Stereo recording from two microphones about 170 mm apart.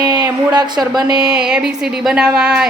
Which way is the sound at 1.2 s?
5° right (ahead or behind).